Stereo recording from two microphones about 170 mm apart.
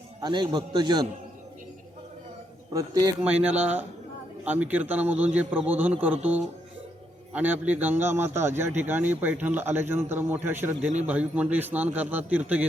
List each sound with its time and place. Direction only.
0.2 s a man's voice: 25° right (ahead or behind)
2.7 s a man's voice: 20° right (ahead or behind)
3.2 s speech: 5° right (ahead or behind)